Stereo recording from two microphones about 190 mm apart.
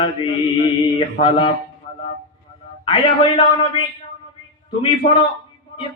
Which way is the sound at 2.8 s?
25° left (ahead or behind).